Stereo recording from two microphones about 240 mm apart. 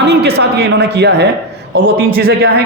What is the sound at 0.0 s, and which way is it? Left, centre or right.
A man's voice, right.